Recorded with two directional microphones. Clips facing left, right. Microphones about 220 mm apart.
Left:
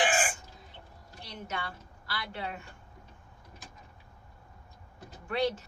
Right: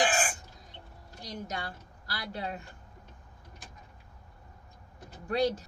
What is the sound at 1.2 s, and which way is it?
A woman's voice, 40° right (ahead or behind).